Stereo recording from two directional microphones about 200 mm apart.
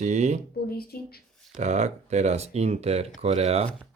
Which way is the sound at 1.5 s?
35° right (ahead or behind).